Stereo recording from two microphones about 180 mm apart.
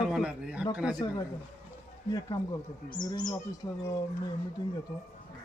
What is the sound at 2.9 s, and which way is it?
Speech, 25° left (ahead or behind).